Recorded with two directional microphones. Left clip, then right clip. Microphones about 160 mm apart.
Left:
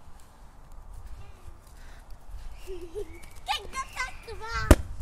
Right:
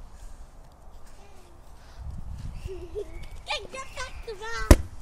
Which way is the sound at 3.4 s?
20° left (ahead or behind).